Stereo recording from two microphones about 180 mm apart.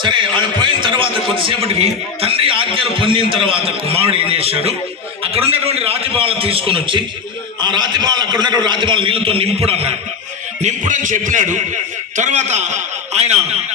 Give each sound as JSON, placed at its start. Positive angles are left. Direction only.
{"t": 0.0, "sound": "a man's voice", "side_deg": -25}
{"t": 10.6, "sound": "a man's voice", "side_deg": -45}